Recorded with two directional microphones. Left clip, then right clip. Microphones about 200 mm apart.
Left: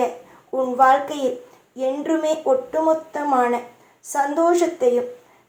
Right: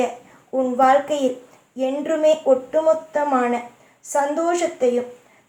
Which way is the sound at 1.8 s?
25° left (ahead or behind).